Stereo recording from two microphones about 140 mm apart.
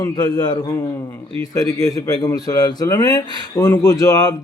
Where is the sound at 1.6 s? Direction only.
25° left (ahead or behind).